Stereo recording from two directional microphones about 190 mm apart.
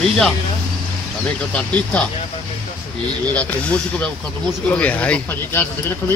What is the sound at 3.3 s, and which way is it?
Speech, 5° left (ahead or behind).